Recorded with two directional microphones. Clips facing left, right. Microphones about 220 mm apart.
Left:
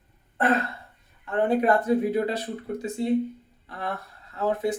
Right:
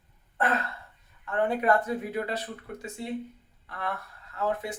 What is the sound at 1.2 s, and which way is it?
Speech, 30° left (ahead or behind).